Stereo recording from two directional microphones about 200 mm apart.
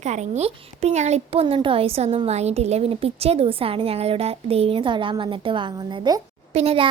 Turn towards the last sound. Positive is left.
turn(degrees=-30)  # may be behind; listen again after turning